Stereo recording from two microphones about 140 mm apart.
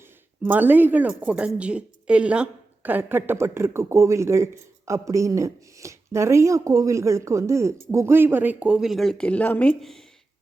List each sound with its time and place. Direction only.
0.4 s a woman's voice: 15° right (ahead or behind); by 10.0 s 5° left (ahead or behind)